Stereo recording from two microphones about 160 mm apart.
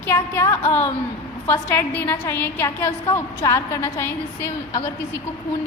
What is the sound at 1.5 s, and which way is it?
A woman's voice, 15° left (ahead or behind).